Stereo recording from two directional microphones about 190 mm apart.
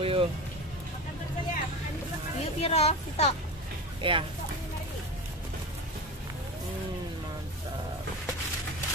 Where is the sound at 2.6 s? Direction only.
35° left (ahead or behind).